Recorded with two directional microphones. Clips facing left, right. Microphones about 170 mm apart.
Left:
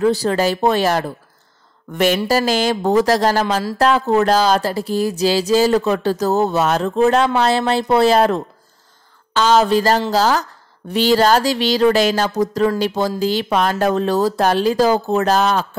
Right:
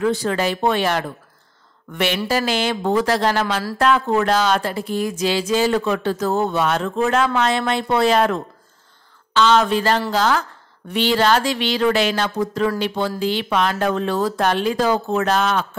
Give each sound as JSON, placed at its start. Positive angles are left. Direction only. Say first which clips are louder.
{"t": 0.0, "sound": "speech", "louder": "left 4 dB", "side_deg": 35}